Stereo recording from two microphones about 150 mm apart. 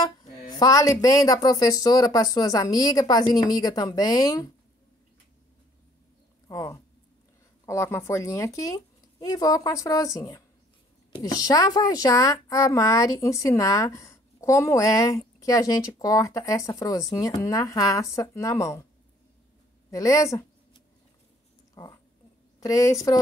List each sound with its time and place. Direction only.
0.0 s a woman's voice: 30° left (ahead or behind)
6.4 s a woman's voice: 25° left (ahead or behind)
19.9 s a woman's voice: 20° left (ahead or behind)
21.8 s a sound: 25° left (ahead or behind)
22.6 s a woman's voice: 20° left (ahead or behind)